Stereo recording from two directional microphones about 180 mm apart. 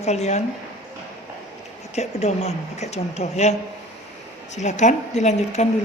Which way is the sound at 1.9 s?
40° left (ahead or behind).